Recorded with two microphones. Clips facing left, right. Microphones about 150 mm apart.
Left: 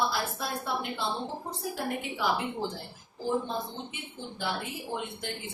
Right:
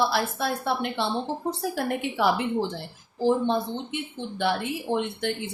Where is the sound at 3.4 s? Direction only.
70° right (ahead or behind).